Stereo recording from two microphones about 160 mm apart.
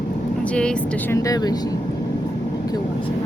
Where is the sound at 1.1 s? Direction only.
25° left (ahead or behind).